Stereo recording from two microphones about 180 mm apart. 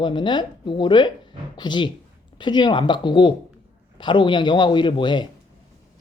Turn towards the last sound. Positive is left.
turn(degrees=25)  # may be behind; listen again after turning